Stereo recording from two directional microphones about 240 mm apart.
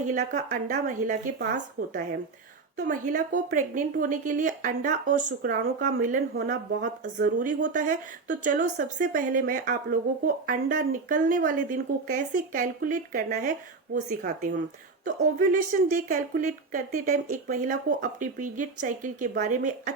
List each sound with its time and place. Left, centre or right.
0.0 s speech: right